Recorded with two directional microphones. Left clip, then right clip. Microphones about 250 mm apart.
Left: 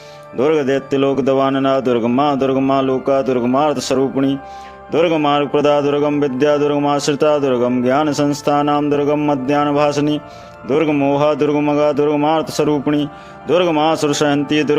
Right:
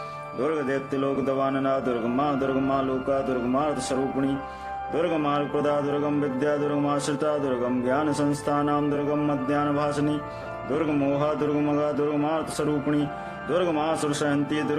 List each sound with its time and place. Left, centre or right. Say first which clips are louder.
0.4 s mantra: left 11 dB; left